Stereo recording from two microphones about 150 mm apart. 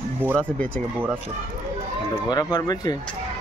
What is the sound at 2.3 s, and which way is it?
Speech, 25° left (ahead or behind).